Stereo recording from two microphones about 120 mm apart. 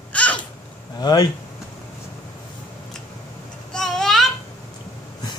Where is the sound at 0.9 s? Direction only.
35° left (ahead or behind).